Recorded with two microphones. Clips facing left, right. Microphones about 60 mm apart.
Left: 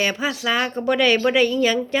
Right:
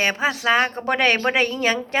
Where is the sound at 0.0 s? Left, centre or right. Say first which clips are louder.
Right 2 dB; right.